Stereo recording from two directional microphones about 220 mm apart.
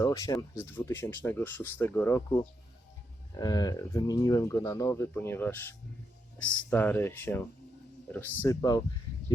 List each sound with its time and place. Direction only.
0.0 s speech: 15° left (ahead or behind)